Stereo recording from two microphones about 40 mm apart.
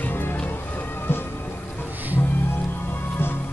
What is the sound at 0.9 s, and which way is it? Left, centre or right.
Music, left.